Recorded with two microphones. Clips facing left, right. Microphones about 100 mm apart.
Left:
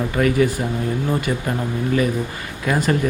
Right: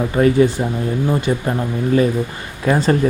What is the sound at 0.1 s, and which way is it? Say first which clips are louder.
Speech: right 5 dB; 30° right (ahead or behind).